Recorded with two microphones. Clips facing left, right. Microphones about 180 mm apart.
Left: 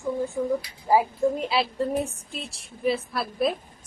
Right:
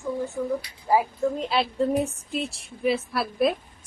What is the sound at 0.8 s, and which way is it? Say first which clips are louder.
Speech: left 1 dB; 20° left (ahead or behind).